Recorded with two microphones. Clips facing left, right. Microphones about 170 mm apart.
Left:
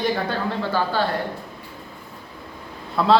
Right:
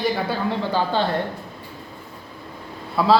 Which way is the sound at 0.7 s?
20° right (ahead or behind).